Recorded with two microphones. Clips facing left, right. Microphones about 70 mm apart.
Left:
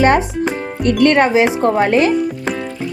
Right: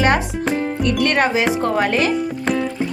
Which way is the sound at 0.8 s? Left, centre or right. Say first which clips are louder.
Left 8 dB; left.